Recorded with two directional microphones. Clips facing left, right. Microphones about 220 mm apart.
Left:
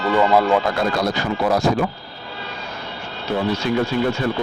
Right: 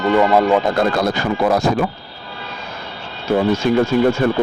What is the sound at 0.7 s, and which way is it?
Speech, 55° right (ahead or behind).